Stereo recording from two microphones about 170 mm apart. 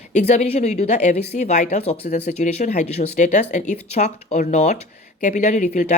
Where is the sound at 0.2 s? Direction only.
40° left (ahead or behind).